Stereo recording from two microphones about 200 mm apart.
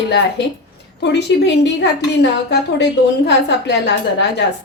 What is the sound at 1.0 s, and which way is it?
A woman's voice, 60° left (ahead or behind).